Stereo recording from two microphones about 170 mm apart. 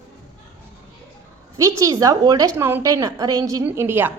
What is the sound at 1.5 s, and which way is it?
A woman's voice, 20° right (ahead or behind).